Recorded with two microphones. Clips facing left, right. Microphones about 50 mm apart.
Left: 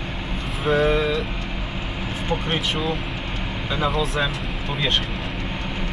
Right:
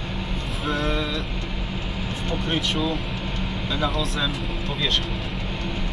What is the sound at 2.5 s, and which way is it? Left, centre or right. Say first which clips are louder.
Speech: right 3 dB; centre.